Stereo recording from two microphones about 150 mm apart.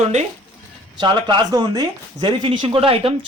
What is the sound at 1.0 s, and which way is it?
Speech, 30° right (ahead or behind).